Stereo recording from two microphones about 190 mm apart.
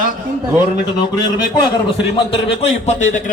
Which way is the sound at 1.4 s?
25° left (ahead or behind).